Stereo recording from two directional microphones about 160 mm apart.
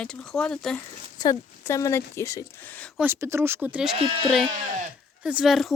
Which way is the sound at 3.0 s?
15° right (ahead or behind).